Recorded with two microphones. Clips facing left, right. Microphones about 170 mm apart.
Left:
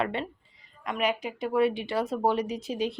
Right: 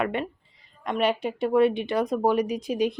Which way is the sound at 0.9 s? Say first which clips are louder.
Right 4 dB; 30° right (ahead or behind).